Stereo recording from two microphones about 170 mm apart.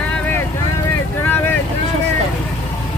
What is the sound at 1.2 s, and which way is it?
Vehicle, 10° left (ahead or behind).